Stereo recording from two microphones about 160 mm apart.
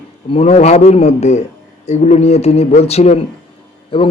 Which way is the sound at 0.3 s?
40° left (ahead or behind).